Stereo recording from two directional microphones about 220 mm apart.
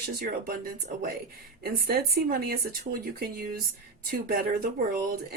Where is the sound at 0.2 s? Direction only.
40° right (ahead or behind).